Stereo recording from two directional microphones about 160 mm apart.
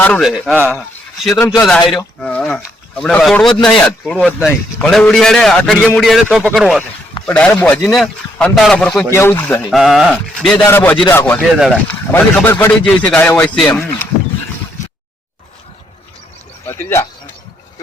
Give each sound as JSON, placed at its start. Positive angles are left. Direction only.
{"t": 0.0, "sound": "a man's voice", "side_deg": 5}
{"t": 9.1, "sound": "a man's voice", "side_deg": 15}
{"t": 9.6, "sound": "a man's voice", "side_deg": 0}
{"t": 10.7, "sound": "a man's voice", "side_deg": 15}
{"t": 16.6, "sound": "speech", "side_deg": 15}